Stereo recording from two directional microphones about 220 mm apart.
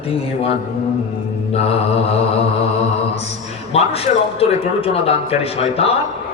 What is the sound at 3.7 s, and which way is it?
A man's voice, 25° left (ahead or behind).